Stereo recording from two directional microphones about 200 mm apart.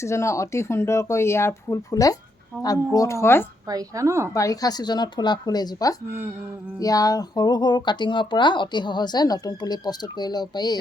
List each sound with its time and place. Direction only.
0.0 s speech: 15° left (ahead or behind)
3.7 s a woman's voice: 15° right (ahead or behind)
4.4 s speech: 15° left (ahead or behind)